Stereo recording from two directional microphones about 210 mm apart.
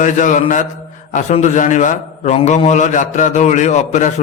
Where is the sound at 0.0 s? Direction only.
35° left (ahead or behind).